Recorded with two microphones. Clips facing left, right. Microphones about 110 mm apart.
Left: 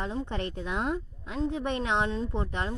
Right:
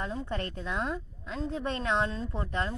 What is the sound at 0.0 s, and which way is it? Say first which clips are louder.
A woman's voice: left 2 dB; 25° left (ahead or behind).